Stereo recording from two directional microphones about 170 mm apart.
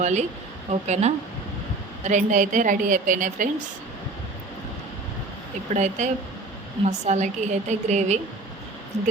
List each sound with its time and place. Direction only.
0.0 s a woman's voice: 45° right (ahead or behind)
5.7 s a woman's voice: 45° right (ahead or behind)